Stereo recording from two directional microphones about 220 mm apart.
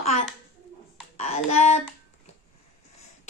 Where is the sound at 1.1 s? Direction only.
30° left (ahead or behind).